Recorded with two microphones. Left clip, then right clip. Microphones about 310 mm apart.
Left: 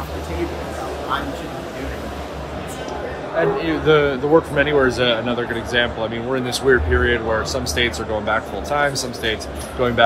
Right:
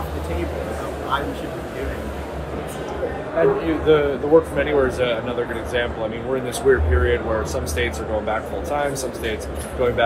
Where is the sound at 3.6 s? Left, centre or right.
Left.